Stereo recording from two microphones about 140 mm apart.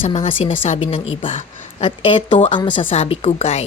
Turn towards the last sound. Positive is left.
turn(degrees=45)  # may be behind; listen again after turning